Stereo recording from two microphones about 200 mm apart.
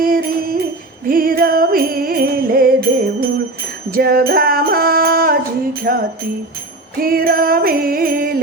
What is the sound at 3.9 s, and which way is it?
Music, 50° right (ahead or behind).